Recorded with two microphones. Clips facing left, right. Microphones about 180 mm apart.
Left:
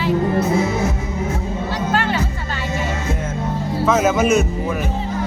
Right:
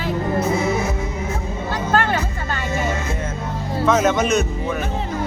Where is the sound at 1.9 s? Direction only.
45° right (ahead or behind).